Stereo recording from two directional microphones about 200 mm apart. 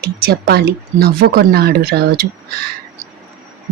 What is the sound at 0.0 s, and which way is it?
Speech, 50° right (ahead or behind).